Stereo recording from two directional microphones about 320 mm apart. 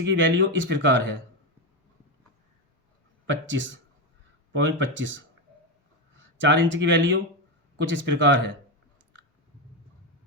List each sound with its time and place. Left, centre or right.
0.0 s speech: right
3.2 s speech: right
6.4 s speech: right